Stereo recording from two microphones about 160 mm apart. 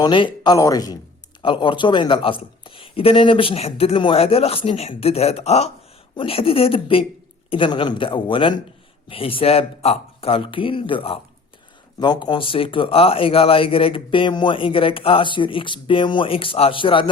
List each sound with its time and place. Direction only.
0.0 s speech: 30° left (ahead or behind)